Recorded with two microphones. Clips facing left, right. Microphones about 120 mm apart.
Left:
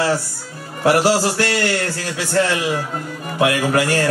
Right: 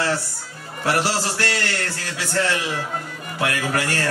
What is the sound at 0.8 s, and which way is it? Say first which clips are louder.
Speech: left 7 dB; 10° left (ahead or behind).